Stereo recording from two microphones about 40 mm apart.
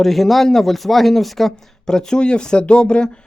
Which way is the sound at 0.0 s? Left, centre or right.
Centre.